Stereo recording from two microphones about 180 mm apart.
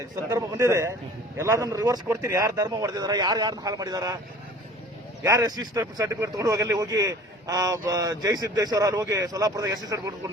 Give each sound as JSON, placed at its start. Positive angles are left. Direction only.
{"t": 0.0, "sound": "a man's voice", "side_deg": -20}
{"t": 5.2, "sound": "speech", "side_deg": -15}